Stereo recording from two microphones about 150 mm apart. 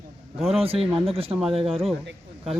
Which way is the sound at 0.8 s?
Centre (ahead or behind).